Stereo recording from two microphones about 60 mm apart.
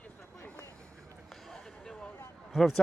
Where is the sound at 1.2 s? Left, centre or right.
Centre.